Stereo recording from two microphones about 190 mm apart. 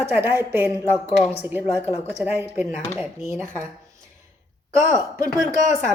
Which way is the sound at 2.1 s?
10° right (ahead or behind).